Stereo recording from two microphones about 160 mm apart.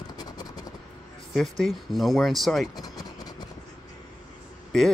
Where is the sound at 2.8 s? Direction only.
25° left (ahead or behind).